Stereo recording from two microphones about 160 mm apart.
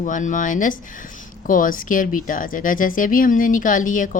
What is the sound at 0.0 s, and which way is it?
Speech, 50° left (ahead or behind).